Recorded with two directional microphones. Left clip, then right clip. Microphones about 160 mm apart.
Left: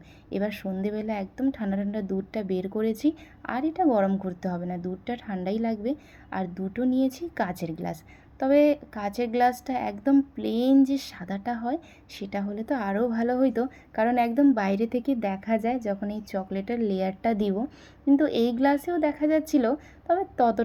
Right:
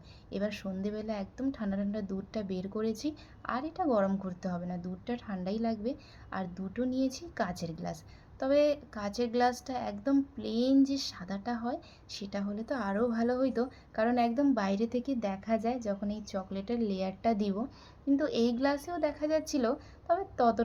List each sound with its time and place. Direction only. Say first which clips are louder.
0.3 s a woman's voice: left 6 dB; 25° left (ahead or behind)